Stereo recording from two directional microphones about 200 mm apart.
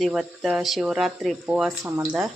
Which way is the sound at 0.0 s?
Centre (ahead or behind).